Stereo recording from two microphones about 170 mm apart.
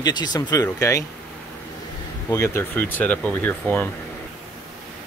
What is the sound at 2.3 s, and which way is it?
Speech, 15° left (ahead or behind).